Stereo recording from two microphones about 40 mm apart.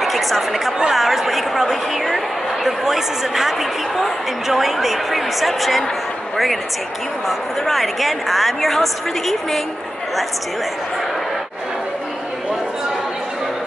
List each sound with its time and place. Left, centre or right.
0.0 s a woman's voice: centre